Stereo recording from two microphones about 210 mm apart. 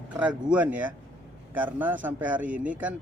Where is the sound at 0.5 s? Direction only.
10° right (ahead or behind).